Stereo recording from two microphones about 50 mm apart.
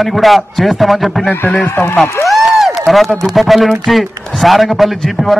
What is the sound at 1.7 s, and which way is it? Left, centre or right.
Speech, left.